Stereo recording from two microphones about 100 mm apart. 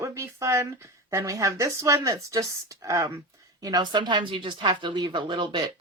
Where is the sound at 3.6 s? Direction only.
45° right (ahead or behind).